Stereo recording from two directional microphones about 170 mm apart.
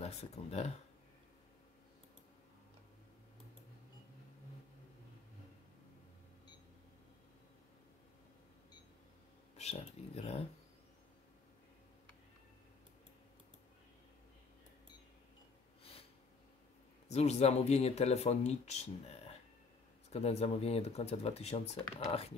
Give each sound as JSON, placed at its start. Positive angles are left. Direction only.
{"t": 0.0, "sound": "speech", "side_deg": 40}
{"t": 9.6, "sound": "speech", "side_deg": 40}
{"t": 15.8, "sound": "snort", "side_deg": 35}
{"t": 17.1, "sound": "speech", "side_deg": 40}